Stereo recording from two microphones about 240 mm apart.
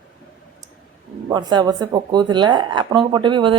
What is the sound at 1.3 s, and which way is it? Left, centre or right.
Speech, centre.